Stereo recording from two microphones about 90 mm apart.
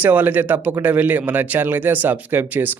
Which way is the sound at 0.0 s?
20° right (ahead or behind).